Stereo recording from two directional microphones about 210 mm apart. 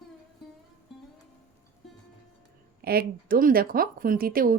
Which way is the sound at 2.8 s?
45° right (ahead or behind).